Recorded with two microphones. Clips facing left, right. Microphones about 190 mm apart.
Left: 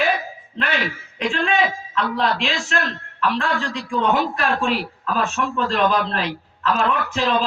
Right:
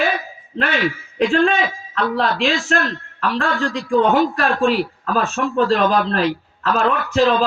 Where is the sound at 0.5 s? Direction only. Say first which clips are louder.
Right 3 dB; 40° right (ahead or behind).